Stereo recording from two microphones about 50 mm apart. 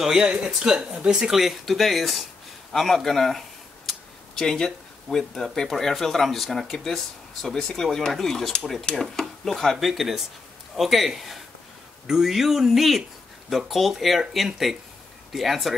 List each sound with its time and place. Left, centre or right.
0.0 s speech: centre
1.4 s speech: centre